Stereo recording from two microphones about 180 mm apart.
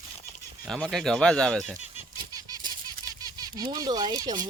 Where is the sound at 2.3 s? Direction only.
20° right (ahead or behind).